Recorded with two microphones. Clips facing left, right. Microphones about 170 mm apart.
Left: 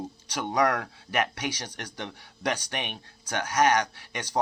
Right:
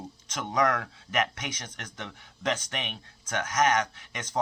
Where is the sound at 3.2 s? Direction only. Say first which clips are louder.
Left 2 dB; 35° left (ahead or behind).